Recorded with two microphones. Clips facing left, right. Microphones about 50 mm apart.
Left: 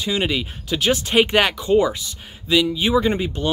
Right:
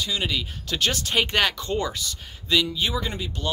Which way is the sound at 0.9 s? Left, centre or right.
Left.